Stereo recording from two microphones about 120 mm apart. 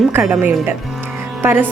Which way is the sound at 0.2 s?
10° right (ahead or behind).